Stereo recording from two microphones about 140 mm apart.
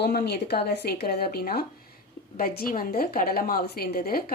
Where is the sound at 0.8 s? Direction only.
90° left.